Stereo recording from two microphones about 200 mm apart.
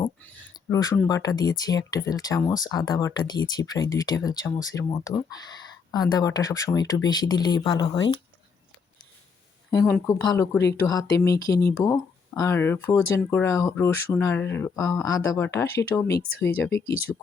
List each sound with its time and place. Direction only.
0.7 s speech: 15° left (ahead or behind)
9.6 s speech: 15° left (ahead or behind)
17.1 s speech: 5° left (ahead or behind)